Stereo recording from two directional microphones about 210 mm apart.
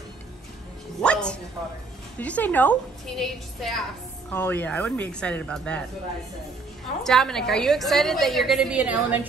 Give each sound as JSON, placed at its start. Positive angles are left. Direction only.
{"t": 1.0, "sound": "music", "side_deg": 5}
{"t": 2.1, "sound": "a woman's voice", "side_deg": 5}
{"t": 7.0, "sound": "a woman's voice", "side_deg": 0}